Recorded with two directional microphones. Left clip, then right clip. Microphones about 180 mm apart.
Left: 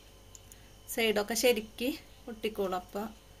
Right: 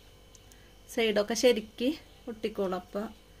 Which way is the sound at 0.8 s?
40° right (ahead or behind).